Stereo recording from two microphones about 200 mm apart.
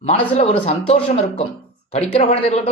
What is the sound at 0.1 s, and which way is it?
Speech, 30° left (ahead or behind).